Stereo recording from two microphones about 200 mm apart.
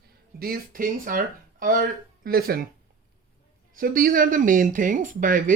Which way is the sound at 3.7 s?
45° right (ahead or behind).